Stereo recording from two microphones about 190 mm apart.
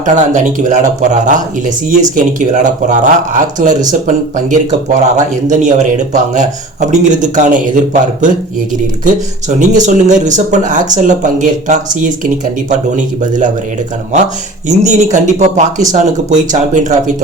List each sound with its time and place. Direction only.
0.0 s speech: 40° right (ahead or behind)
14.8 s speech: 40° right (ahead or behind)